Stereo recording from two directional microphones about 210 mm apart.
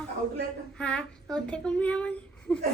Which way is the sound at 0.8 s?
5° left (ahead or behind).